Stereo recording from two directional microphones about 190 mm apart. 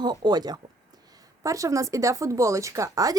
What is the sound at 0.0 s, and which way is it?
A woman's voice, 20° right (ahead or behind).